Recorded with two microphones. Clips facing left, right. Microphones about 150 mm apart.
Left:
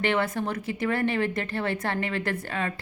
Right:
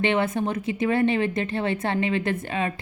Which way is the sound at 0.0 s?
20° right (ahead or behind).